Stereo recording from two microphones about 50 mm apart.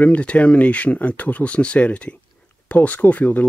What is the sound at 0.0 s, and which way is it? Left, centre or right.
Speech, left.